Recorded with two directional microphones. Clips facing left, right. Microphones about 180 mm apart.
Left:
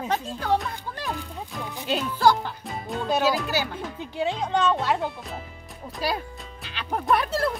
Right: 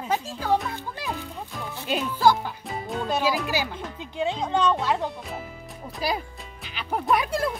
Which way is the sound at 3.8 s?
5° left (ahead or behind).